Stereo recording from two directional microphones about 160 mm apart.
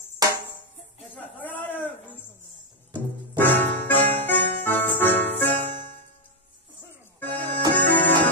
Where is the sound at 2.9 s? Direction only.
10° left (ahead or behind).